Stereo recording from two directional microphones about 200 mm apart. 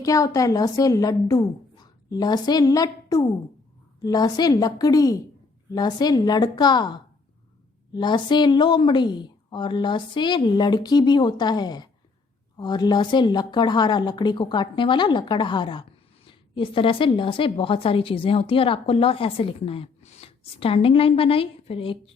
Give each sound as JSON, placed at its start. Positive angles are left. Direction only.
{"t": 0.0, "sound": "a woman's voice", "side_deg": 15}